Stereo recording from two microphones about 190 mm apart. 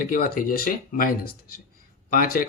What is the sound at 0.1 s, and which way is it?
Speech, 50° left (ahead or behind).